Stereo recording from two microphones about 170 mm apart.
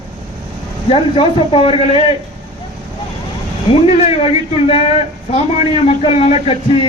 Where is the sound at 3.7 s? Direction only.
35° left (ahead or behind).